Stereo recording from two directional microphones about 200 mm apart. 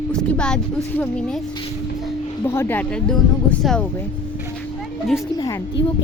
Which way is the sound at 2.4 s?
10° left (ahead or behind).